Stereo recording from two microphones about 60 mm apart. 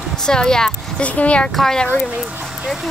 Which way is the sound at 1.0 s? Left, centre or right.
Left.